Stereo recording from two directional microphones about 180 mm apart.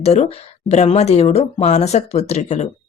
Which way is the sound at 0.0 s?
35° left (ahead or behind).